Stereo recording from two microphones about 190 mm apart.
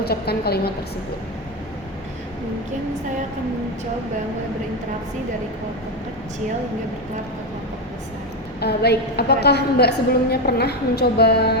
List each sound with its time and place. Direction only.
0.0 s a woman's voice: 55° left (ahead or behind)
8.6 s a woman's voice: 60° left (ahead or behind)